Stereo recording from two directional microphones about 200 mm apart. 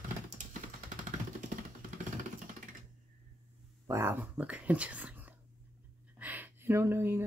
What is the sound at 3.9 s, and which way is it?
Speech, 10° right (ahead or behind).